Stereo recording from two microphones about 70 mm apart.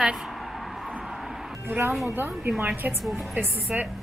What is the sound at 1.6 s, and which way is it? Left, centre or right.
Speech, right.